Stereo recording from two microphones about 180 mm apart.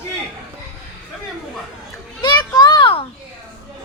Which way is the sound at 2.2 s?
25° left (ahead or behind).